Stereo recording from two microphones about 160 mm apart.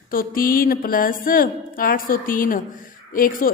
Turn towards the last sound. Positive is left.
turn(degrees=60)  # may be behind; listen again after turning